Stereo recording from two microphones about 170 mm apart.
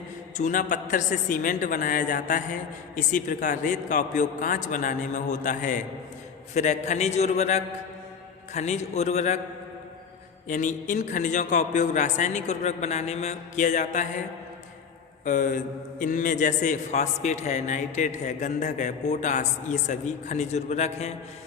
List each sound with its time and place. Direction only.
0.3 s a man's voice: 50° left (ahead or behind)
10.5 s a man's voice: 45° left (ahead or behind)
15.2 s a man's voice: 50° left (ahead or behind)